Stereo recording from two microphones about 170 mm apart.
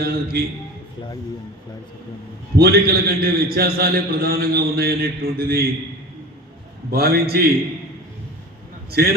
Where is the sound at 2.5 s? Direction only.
65° right (ahead or behind).